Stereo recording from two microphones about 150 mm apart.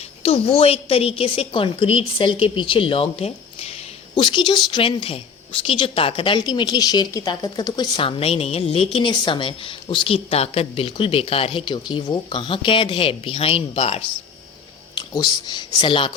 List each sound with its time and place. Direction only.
0.2 s a woman's voice: 40° left (ahead or behind)
4.1 s a woman's voice: 30° left (ahead or behind)
14.9 s speech: 30° left (ahead or behind)